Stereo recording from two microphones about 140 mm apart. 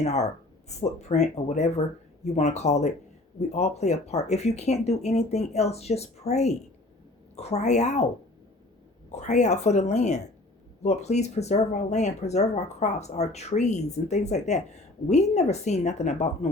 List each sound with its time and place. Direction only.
0.0 s speech: 55° left (ahead or behind)
9.0 s speech: 55° left (ahead or behind)